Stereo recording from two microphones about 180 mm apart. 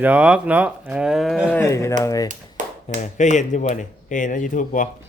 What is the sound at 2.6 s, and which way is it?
Tap, 45° right (ahead or behind).